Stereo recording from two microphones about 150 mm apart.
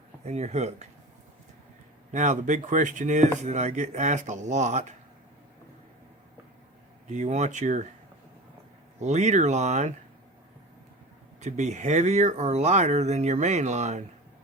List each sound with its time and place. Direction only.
0.3 s speech: 45° right (ahead or behind)
2.1 s speech: 55° right (ahead or behind)
7.1 s speech: 50° right (ahead or behind)
9.0 s speech: 50° right (ahead or behind)
11.3 s speech: 50° right (ahead or behind)